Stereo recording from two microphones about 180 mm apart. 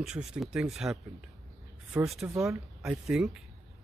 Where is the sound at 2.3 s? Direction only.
15° right (ahead or behind).